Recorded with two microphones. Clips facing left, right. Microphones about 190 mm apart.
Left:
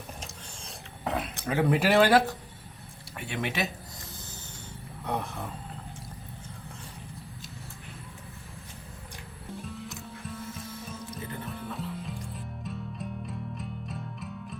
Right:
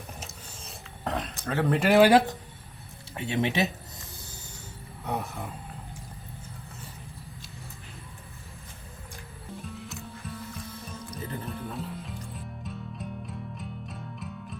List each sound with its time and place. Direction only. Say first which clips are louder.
0.2 s gears: even; centre (ahead or behind)
1.5 s speech: right 1 dB; 10° left (ahead or behind)
2.0 s speech: right 5 dB; 15° right (ahead or behind)
5.0 s speech: even; 10° right (ahead or behind)
9.6 s music: even; centre (ahead or behind)
11.4 s music: right 1 dB; centre (ahead or behind)